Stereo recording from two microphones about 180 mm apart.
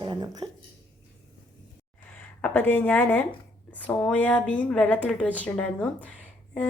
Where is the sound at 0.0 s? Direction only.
25° right (ahead or behind).